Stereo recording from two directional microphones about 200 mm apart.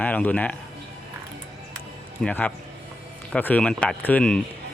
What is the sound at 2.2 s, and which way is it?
Speech, 10° left (ahead or behind).